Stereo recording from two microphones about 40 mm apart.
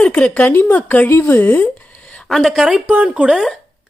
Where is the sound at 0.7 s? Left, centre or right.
Left.